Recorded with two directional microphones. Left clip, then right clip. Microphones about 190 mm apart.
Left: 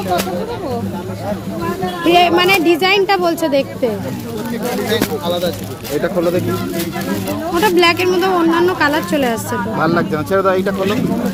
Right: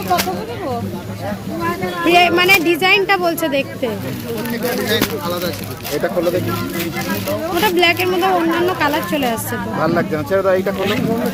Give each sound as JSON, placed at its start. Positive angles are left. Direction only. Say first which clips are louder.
{"t": 2.0, "sound": "speech", "louder": "even", "side_deg": 0}
{"t": 7.6, "sound": "speech", "louder": "left 2 dB", "side_deg": 5}
{"t": 9.8, "sound": "speech", "louder": "even", "side_deg": 35}